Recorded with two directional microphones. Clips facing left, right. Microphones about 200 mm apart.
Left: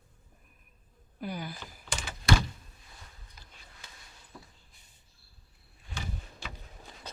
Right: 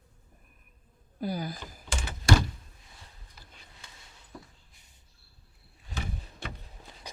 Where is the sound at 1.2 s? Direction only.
35° right (ahead or behind).